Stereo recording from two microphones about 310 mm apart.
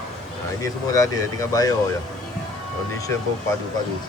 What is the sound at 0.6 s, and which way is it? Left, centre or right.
Speech, centre.